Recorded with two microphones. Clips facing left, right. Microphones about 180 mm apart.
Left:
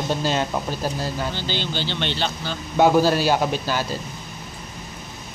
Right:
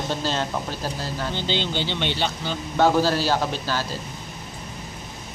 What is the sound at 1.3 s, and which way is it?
Speech, 20° right (ahead or behind).